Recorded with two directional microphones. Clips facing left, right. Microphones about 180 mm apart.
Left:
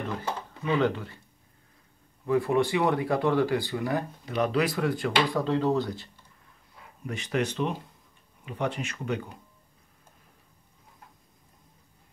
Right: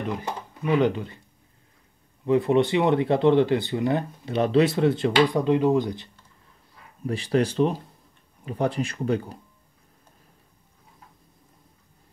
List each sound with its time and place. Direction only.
0.0 s speech: 15° right (ahead or behind)
2.2 s speech: 20° right (ahead or behind)
7.1 s speech: 35° right (ahead or behind)